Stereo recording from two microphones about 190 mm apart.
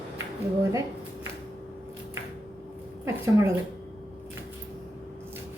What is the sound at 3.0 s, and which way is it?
Speech, 15° right (ahead or behind).